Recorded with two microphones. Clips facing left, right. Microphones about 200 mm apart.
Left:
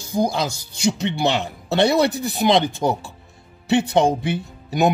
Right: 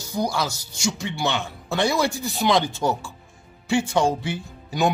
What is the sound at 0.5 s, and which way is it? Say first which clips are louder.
Speech: left 5 dB; 55° left (ahead or behind).